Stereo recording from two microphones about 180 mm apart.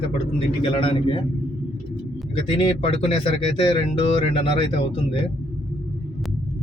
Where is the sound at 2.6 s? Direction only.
30° left (ahead or behind).